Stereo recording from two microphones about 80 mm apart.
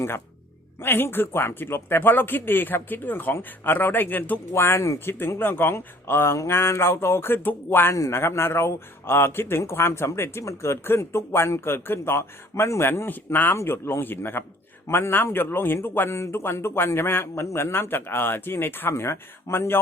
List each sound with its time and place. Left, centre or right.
0.8 s a man's voice: left